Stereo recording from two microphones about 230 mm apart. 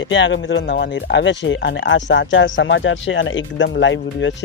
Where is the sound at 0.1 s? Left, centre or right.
Left.